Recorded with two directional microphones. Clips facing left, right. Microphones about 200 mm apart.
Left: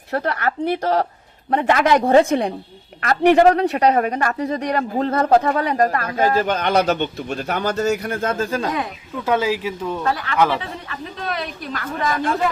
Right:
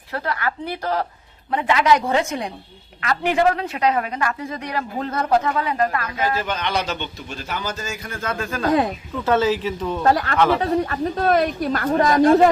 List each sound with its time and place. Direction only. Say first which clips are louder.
0.1 s speech: left 4 dB; 45° left (ahead or behind)
3.0 s speech: left 6 dB; 45° left (ahead or behind)
7.3 s speech: left 4 dB; 60° left (ahead or behind)
8.4 s speech: even; 30° left (ahead or behind)
9.2 s speech: right 1 dB; 10° left (ahead or behind)
10.0 s speech: right 2 dB; 40° right (ahead or behind)